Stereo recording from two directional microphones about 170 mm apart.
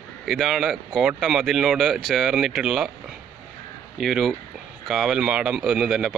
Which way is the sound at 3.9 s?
Centre (ahead or behind).